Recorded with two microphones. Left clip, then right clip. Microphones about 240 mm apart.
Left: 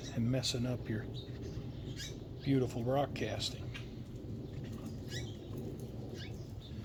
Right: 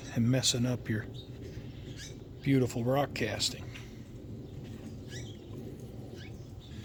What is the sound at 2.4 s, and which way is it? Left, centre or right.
Speech, right.